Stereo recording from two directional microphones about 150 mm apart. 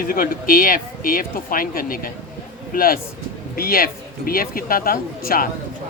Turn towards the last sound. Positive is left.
turn(degrees=70)  # may be behind; listen again after turning